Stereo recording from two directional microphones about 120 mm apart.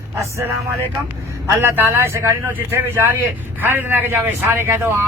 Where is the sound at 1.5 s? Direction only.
20° right (ahead or behind).